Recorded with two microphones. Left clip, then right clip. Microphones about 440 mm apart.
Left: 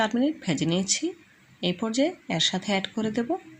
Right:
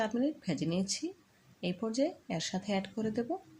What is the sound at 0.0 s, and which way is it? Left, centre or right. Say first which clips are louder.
Speech: left 8 dB; left.